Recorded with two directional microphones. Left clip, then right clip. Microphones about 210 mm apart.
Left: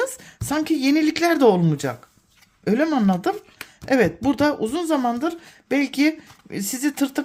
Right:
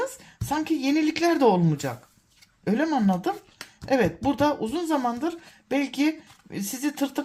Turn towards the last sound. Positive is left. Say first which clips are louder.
# left 4 dB
turn(degrees=30)  # may be behind; listen again after turning